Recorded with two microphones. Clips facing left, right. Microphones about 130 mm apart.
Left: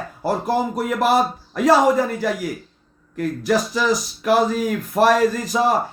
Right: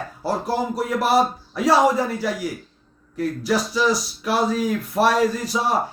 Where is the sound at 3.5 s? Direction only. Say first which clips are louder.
Left 2 dB; 50° left (ahead or behind).